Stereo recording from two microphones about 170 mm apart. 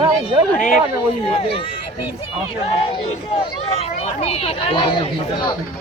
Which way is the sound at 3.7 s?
35° left (ahead or behind).